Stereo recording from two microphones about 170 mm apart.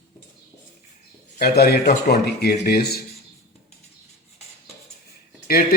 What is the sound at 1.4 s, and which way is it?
Speech, 70° left (ahead or behind).